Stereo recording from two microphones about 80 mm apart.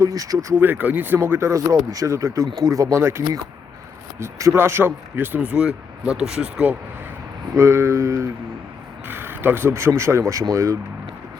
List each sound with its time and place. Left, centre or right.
0.0 s speech: right
0.5 s speech: right
7.5 s speech: right
9.0 s speech: right